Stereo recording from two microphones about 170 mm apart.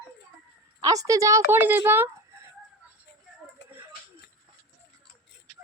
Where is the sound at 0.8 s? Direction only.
20° right (ahead or behind).